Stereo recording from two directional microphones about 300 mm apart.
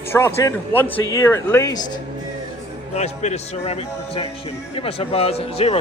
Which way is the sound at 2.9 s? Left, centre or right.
Left.